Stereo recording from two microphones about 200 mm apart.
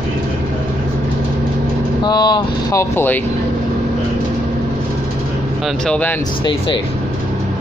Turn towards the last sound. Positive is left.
turn(degrees=10)  # may be behind; listen again after turning